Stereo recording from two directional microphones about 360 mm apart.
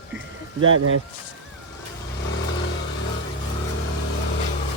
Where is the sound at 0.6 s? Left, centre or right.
Right.